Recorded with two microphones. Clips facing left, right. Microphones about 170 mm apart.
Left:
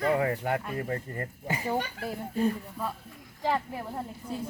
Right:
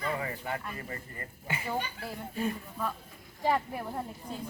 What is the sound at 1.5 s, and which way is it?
Speech, 40° left (ahead or behind).